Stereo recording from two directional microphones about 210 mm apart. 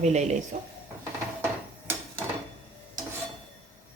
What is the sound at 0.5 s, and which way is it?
Speech, 30° right (ahead or behind).